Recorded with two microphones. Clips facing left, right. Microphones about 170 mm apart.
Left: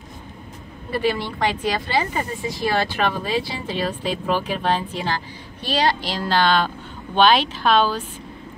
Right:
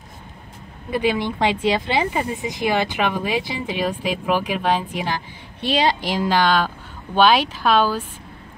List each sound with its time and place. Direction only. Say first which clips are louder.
0.8 s a woman's voice: right 2 dB; 15° right (ahead or behind)